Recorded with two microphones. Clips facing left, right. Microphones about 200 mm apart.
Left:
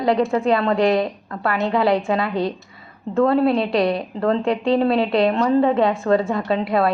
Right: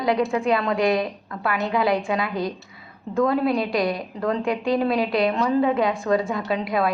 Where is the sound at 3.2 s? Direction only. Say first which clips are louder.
Left 4 dB; 35° left (ahead or behind).